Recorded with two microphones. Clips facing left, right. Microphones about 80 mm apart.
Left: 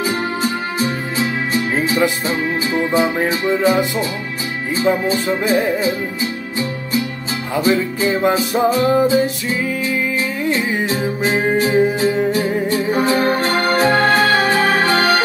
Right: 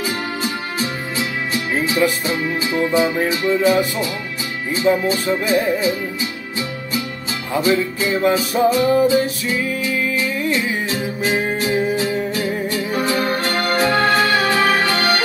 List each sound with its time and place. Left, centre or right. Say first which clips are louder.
0.1 s music: left 4 dB; left
4.8 s music: even; left
7.6 s music: left 2 dB; left